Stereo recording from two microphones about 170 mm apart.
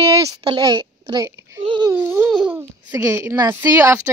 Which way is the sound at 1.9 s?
15° right (ahead or behind).